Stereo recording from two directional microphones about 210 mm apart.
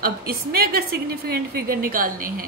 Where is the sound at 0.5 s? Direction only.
45° right (ahead or behind).